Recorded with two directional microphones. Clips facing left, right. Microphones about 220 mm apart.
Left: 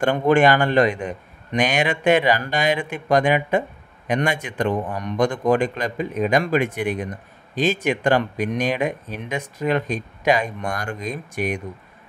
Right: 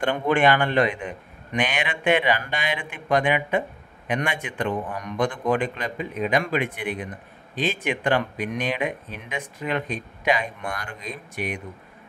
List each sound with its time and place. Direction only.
0.0 s a man's voice: 45° left (ahead or behind)